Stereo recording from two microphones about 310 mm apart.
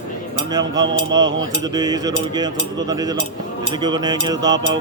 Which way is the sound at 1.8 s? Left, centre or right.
Centre.